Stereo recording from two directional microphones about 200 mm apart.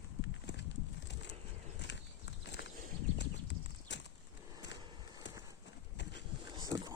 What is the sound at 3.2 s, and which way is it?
Clip-clop, 60° left (ahead or behind).